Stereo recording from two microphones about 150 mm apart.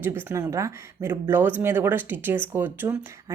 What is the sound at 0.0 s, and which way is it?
Speech, 15° right (ahead or behind).